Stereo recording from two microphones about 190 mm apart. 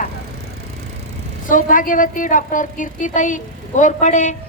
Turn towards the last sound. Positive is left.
turn(degrees=40)  # may be behind; listen again after turning